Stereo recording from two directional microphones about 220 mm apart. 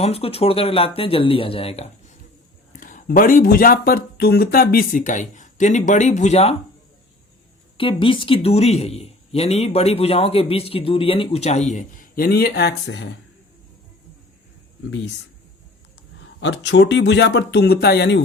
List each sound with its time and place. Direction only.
0.0 s speech: 25° left (ahead or behind)
7.8 s speech: 25° left (ahead or behind); by 13.1 s 50° left (ahead or behind)
14.8 s speech: 60° left (ahead or behind)
16.4 s speech: 55° left (ahead or behind)